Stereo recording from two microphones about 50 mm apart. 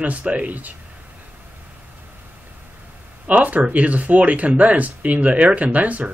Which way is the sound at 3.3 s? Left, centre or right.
Right.